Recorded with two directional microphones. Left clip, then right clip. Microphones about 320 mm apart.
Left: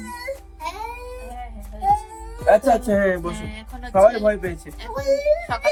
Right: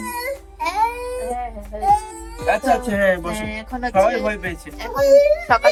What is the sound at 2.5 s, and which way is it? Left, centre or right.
Speech, centre.